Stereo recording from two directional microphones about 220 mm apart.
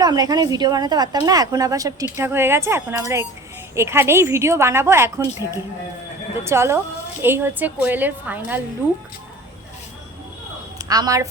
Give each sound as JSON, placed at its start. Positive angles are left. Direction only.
{"t": 0.0, "sound": "a woman's voice", "side_deg": -20}
{"t": 6.4, "sound": "a woman's voice", "side_deg": -10}
{"t": 10.8, "sound": "a woman's voice", "side_deg": -15}